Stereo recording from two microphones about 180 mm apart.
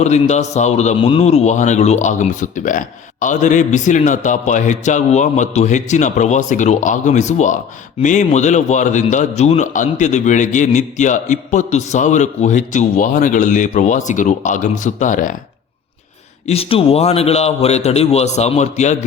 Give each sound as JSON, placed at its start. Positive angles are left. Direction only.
{"t": 0.0, "sound": "a man's voice", "side_deg": 40}
{"t": 16.5, "sound": "a man's voice", "side_deg": 30}